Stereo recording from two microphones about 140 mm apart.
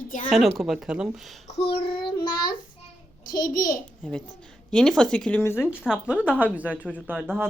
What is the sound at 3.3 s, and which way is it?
Speech, 80° left.